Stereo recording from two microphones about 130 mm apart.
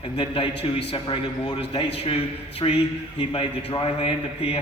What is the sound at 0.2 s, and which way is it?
A man's voice, 45° left (ahead or behind).